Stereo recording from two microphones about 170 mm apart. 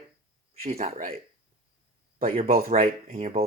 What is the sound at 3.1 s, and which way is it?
Speech, 40° right (ahead or behind).